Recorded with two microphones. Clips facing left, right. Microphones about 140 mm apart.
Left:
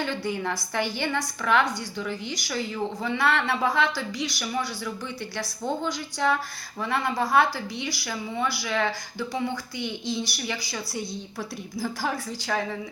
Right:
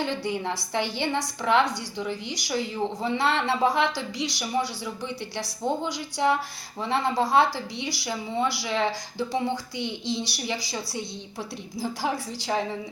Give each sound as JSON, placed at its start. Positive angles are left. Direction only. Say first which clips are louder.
{"t": 0.0, "sound": "a woman's voice", "louder": "even", "side_deg": -20}
{"t": 5.6, "sound": "a woman's voice", "louder": "right 1 dB", "side_deg": -20}